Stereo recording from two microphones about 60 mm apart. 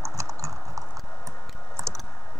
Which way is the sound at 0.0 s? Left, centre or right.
Right.